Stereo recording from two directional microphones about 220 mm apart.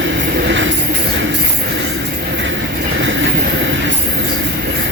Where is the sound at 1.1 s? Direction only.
55° right (ahead or behind).